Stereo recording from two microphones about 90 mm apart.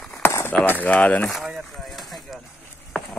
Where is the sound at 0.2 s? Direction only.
25° left (ahead or behind).